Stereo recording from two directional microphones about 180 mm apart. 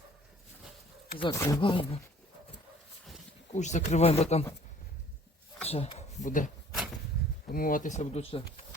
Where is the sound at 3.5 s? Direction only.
40° left (ahead or behind).